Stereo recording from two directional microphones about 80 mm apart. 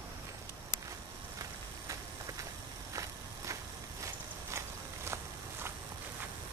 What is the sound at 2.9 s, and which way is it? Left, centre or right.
Vehicle, right.